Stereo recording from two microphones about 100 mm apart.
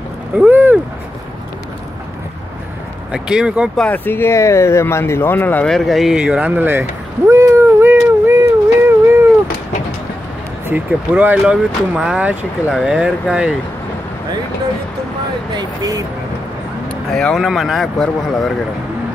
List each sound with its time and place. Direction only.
0.4 s speech: 20° right (ahead or behind)
3.1 s speech: 10° right (ahead or behind)
3.7 s speech: 15° left (ahead or behind)
5.7 s a sound: centre (ahead or behind); by 9.3 s 25° right (ahead or behind)
10.7 s speech: 15° right (ahead or behind)
15.5 s speech: 35° right (ahead or behind)
17.1 s speech: centre (ahead or behind)